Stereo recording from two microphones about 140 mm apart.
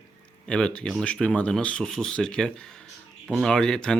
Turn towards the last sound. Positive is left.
turn(degrees=5)  # may be behind; listen again after turning